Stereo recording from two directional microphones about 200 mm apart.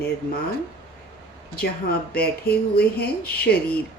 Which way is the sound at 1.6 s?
50° left (ahead or behind).